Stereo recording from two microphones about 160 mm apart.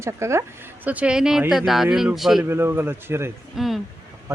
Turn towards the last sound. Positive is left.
turn(degrees=-20)  # may be behind; listen again after turning